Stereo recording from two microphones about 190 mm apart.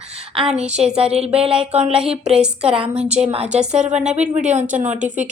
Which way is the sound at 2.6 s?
30° right (ahead or behind).